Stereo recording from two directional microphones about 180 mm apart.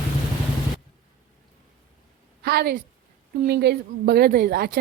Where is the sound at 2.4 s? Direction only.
60° right (ahead or behind).